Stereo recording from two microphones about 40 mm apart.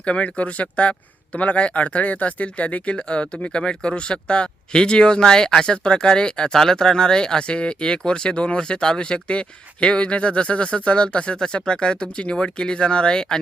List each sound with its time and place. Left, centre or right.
0.0 s speech: left